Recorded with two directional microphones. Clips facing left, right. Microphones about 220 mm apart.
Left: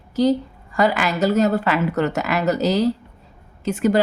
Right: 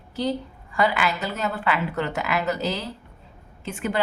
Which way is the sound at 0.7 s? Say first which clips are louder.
Left 4 dB; 40° left (ahead or behind).